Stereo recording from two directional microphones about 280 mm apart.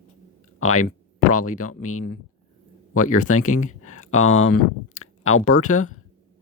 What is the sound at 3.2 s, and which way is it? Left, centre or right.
Speech, left.